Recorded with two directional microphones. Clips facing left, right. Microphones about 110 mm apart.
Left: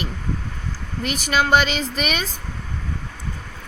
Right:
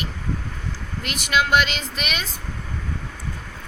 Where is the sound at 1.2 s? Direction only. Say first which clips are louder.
Left 1 dB; 40° left (ahead or behind).